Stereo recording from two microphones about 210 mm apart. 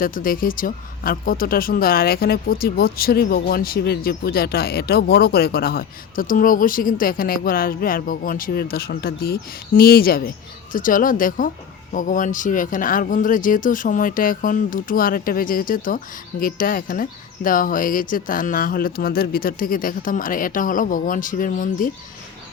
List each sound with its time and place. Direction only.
0.0 s speech: 40° left (ahead or behind)